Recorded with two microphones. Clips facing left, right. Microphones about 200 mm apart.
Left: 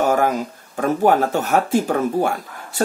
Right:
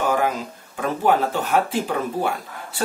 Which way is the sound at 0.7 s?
45° left (ahead or behind).